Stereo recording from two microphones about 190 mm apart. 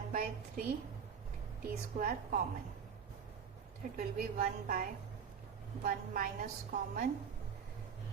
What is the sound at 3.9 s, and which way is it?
A woman's voice, 50° right (ahead or behind).